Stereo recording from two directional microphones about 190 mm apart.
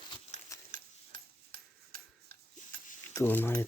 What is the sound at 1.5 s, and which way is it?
Tick-tock, 50° right (ahead or behind).